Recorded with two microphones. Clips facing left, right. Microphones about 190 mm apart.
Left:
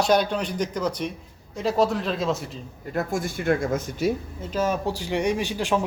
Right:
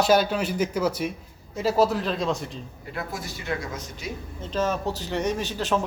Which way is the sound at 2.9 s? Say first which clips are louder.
Left 7 dB; 45° left (ahead or behind).